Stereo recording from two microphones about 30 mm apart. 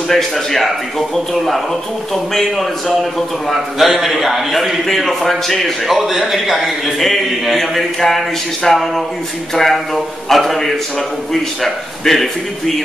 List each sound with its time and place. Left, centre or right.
0.1 s speech: centre
2.9 s speech: centre
3.7 s a man's voice: centre
12.1 s speech: centre